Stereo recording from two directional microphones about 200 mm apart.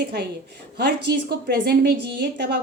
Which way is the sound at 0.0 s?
55° right (ahead or behind).